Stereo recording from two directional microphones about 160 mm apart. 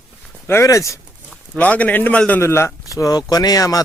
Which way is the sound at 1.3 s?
10° left (ahead or behind).